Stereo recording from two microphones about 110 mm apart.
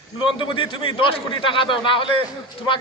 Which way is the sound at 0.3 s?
50° left (ahead or behind).